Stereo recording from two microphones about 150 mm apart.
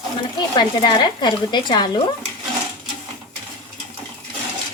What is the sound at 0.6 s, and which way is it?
A woman's voice, 30° left (ahead or behind).